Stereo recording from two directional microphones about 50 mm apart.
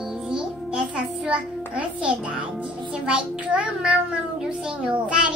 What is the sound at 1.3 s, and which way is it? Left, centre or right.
A child's voice, right.